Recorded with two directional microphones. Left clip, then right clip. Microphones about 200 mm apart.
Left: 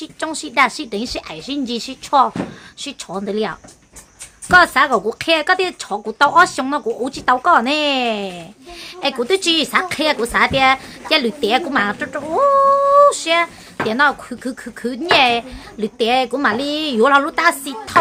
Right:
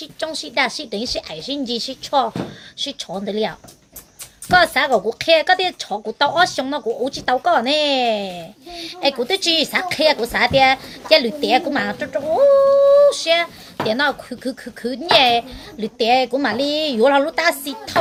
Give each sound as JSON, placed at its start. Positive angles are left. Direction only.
{"t": 0.0, "sound": "speech", "side_deg": 20}